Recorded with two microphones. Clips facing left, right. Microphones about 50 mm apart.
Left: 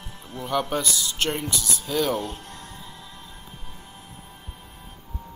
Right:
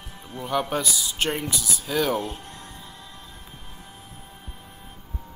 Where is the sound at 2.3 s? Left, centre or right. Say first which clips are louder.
Even; right.